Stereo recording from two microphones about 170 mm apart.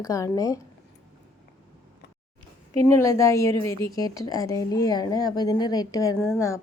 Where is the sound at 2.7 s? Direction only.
15° left (ahead or behind).